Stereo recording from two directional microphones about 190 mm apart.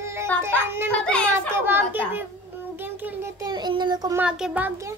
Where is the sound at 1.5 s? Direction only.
10° right (ahead or behind).